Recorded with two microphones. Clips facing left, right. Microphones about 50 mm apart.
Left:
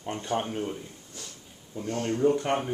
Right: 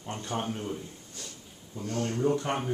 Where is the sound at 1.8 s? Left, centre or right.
Left.